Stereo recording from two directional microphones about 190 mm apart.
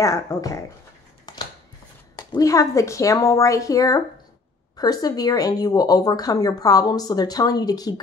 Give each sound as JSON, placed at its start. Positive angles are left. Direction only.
{"t": 0.0, "sound": "a woman's voice", "side_deg": 20}
{"t": 1.2, "sound": "a sound", "side_deg": 20}
{"t": 2.1, "sound": "a woman's voice", "side_deg": 20}